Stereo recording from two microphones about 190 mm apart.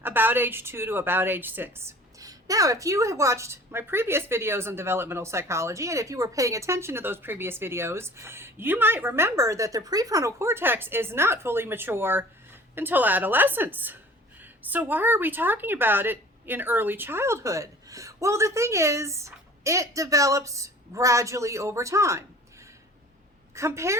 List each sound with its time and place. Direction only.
0.0 s a woman's voice: 10° right (ahead or behind)
23.6 s a woman's voice: 15° right (ahead or behind)